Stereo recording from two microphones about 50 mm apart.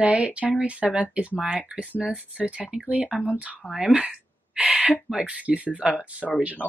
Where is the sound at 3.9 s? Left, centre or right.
Right.